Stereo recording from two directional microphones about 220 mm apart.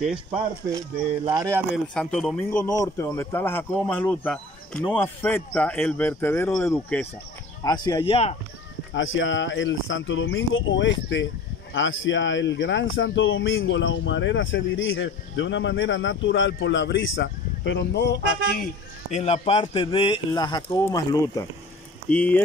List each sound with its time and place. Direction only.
0.7 s speech: 15° right (ahead or behind)
2.0 s speech: 5° left (ahead or behind); by 8.4 s 25° left (ahead or behind)
8.9 s speech: 60° left (ahead or behind)
19.0 s speech: 30° left (ahead or behind); by 22.4 s 5° left (ahead or behind)